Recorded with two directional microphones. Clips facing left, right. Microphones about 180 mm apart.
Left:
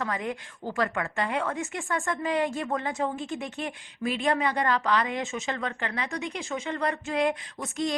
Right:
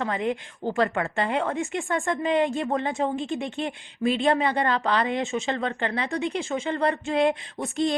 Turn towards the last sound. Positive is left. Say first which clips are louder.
# right 4 dB
turn(degrees=-30)  # may be behind; listen again after turning